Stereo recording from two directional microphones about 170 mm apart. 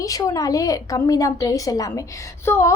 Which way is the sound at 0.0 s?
20° left (ahead or behind).